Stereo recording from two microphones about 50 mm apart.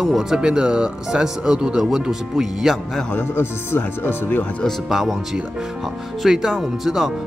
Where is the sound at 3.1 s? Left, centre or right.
Left.